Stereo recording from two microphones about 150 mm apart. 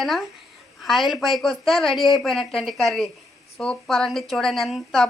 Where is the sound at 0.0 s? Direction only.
Centre (ahead or behind).